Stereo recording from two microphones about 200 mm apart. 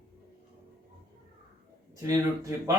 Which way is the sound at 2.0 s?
15° right (ahead or behind).